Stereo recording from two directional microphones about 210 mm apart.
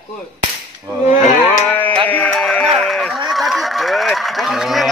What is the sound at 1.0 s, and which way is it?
Cattle, 35° left (ahead or behind).